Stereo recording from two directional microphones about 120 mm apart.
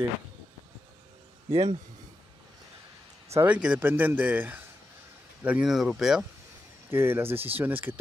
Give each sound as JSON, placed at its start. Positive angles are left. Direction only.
{"t": 1.5, "sound": "a man's voice", "side_deg": -60}
{"t": 3.4, "sound": "speech", "side_deg": -10}
{"t": 6.9, "sound": "speech", "side_deg": -20}